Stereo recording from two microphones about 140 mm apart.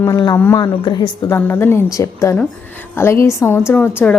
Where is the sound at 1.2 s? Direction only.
15° left (ahead or behind).